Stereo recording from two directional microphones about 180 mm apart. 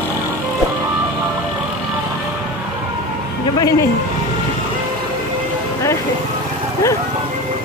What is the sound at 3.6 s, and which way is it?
Music, 20° left (ahead or behind).